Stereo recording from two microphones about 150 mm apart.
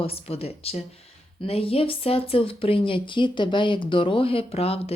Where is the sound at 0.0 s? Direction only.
40° left (ahead or behind).